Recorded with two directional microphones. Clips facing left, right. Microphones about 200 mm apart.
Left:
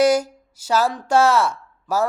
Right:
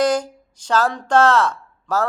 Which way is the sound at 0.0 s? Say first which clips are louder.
Left 2 dB; 10° left (ahead or behind).